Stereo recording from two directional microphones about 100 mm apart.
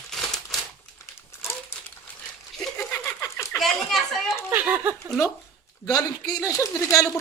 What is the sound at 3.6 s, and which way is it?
Speech, centre (ahead or behind).